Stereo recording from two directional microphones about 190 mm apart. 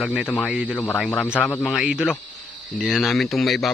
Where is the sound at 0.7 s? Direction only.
10° left (ahead or behind).